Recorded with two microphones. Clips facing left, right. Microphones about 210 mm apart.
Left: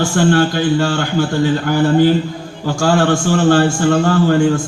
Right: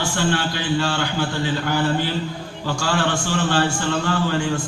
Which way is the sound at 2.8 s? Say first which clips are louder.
Left 9 dB; 45° left (ahead or behind).